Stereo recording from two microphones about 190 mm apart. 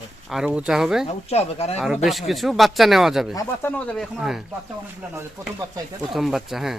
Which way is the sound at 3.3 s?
20° left (ahead or behind).